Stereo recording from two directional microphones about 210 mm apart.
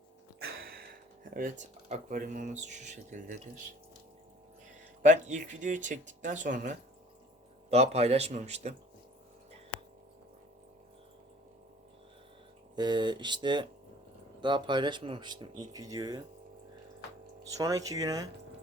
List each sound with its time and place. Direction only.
0.3 s a sound: 45° right (ahead or behind)
1.3 s speech: 40° right (ahead or behind)
5.0 s speech: 35° right (ahead or behind)
12.7 s speech: 20° right (ahead or behind)
17.6 s speech: 15° right (ahead or behind)